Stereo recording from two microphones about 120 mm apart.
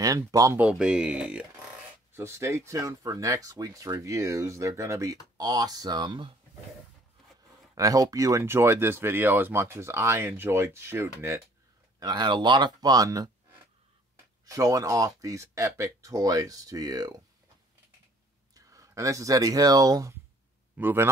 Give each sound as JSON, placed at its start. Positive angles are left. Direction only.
{"t": 0.0, "sound": "speech", "side_deg": -30}
{"t": 0.6, "sound": "speech", "side_deg": -5}
{"t": 2.1, "sound": "speech", "side_deg": -20}
{"t": 7.7, "sound": "speech", "side_deg": -30}
{"t": 12.0, "sound": "speech", "side_deg": -35}
{"t": 14.4, "sound": "speech", "side_deg": -30}
{"t": 18.5, "sound": "speech", "side_deg": -30}
{"t": 20.7, "sound": "speech", "side_deg": -15}